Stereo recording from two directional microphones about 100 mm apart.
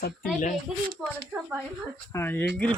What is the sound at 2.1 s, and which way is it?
Speech, 20° left (ahead or behind).